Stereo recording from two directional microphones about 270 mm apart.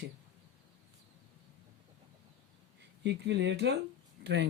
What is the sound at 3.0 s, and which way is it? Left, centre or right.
Speech, right.